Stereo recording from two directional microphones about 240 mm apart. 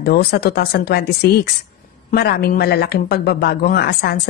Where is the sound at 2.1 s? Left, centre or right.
Left.